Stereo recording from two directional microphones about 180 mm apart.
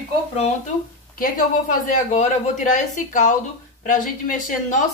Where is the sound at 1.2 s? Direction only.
50° left (ahead or behind).